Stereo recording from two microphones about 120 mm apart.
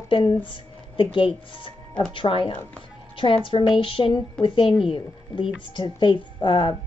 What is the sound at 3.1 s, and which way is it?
Music, 45° left (ahead or behind).